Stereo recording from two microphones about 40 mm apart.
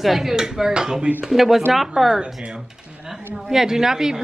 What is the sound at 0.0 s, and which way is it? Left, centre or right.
A woman's voice, centre.